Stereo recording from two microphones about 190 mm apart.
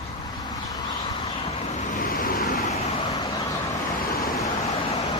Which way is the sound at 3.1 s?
20° left (ahead or behind).